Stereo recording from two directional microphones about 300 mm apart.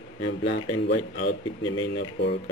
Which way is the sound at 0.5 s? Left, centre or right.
Left.